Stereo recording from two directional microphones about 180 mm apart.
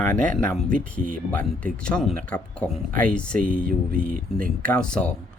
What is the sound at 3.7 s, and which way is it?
Speech, 50° right (ahead or behind).